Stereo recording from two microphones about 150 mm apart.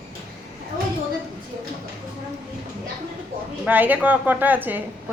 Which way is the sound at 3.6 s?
10° right (ahead or behind).